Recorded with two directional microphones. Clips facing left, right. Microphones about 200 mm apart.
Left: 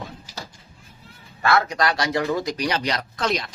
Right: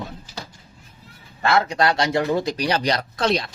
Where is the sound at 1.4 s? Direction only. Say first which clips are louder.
Right 2 dB; 25° right (ahead or behind).